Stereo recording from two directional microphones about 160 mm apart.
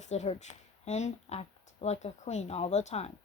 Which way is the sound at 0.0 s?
45° left (ahead or behind).